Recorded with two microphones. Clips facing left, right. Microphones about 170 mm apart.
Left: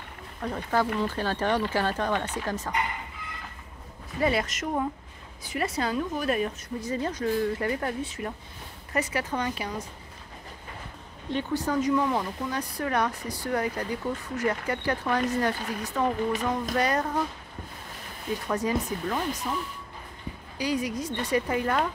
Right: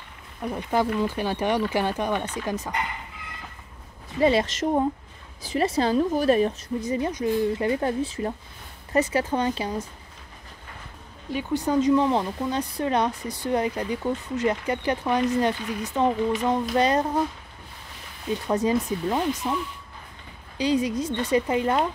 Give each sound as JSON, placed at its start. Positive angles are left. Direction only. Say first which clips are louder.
{"t": 0.4, "sound": "speech", "louder": "right 2 dB", "side_deg": -15}
{"t": 4.2, "sound": "a woman's voice", "louder": "right 6 dB", "side_deg": -25}
{"t": 6.8, "sound": "speech", "louder": "right 3 dB", "side_deg": -20}
{"t": 11.5, "sound": "speech", "louder": "right 5 dB", "side_deg": -20}
{"t": 18.5, "sound": "speech", "louder": "right 5 dB", "side_deg": -25}
{"t": 20.5, "sound": "speech", "louder": "right 5 dB", "side_deg": -25}